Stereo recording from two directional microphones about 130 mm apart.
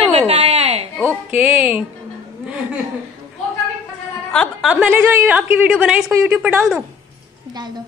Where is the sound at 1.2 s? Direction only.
10° right (ahead or behind).